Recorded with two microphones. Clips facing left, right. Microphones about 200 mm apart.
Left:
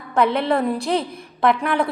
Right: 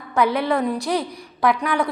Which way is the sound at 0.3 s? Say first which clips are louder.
Left 1 dB; centre (ahead or behind).